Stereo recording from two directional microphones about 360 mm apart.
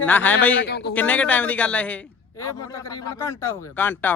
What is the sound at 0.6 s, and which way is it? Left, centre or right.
Speech, left.